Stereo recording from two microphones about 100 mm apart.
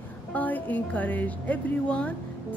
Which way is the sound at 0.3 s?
15° left (ahead or behind).